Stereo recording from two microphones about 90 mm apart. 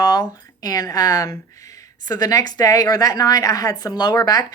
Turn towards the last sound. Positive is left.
turn(degrees=45)  # may be behind; listen again after turning